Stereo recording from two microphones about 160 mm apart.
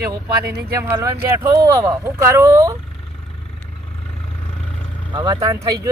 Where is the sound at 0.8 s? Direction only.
15° right (ahead or behind).